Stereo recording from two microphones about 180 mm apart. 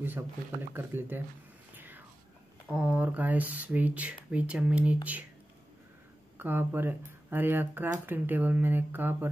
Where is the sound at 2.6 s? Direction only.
5° right (ahead or behind).